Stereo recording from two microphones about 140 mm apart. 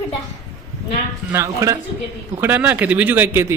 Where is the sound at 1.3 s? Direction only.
20° right (ahead or behind).